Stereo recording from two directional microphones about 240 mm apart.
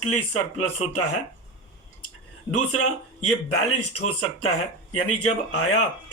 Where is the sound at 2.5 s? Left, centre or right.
Left.